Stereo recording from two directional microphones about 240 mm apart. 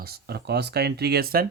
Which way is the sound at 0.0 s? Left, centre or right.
Right.